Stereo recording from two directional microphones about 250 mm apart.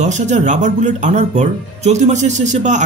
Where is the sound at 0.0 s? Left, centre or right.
Right.